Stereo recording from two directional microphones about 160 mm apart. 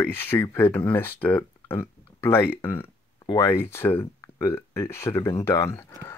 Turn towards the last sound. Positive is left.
turn(degrees=15)  # may be behind; listen again after turning